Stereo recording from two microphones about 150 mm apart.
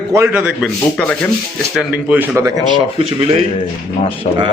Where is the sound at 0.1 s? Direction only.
20° right (ahead or behind).